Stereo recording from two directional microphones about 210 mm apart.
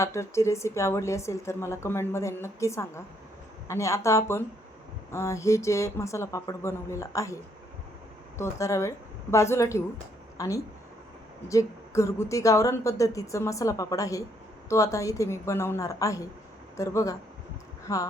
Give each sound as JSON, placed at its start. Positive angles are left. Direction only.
{"t": 0.0, "sound": "a woman's voice", "side_deg": 15}
{"t": 8.4, "sound": "a woman's voice", "side_deg": 15}